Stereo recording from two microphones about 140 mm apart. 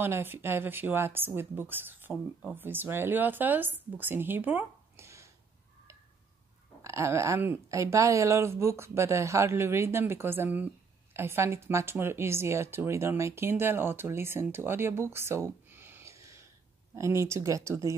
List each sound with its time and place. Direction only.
0.0 s speech: 15° right (ahead or behind)
6.8 s a woman's voice: 20° right (ahead or behind)